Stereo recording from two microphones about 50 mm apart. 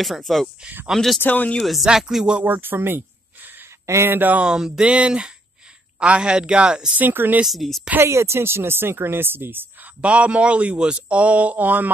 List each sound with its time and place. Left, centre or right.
0.2 s a woman's voice: centre
1.2 s speech: left
1.6 s a woman's voice: centre
1.9 s a sound: centre
2.4 s speech: right
3.8 s speech: right
4.1 s speech: right
4.4 s a sound: centre
4.8 s speech: right
7.0 s speech: right
7.4 s a woman's voice: centre
8.0 s speech: right
10.0 s speech: right